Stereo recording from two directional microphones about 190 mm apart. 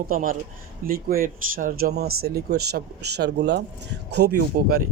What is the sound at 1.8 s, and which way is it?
Speech, 55° right (ahead or behind).